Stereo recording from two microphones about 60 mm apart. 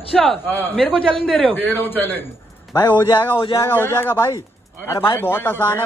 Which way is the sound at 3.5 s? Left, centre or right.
Left.